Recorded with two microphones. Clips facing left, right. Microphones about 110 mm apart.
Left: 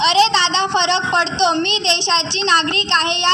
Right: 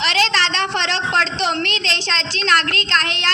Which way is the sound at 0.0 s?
20° left (ahead or behind).